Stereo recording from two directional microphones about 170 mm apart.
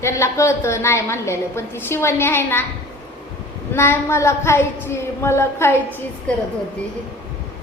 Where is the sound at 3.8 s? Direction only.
15° left (ahead or behind).